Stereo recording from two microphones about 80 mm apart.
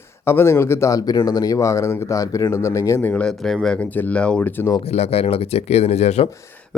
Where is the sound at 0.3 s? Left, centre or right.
Left.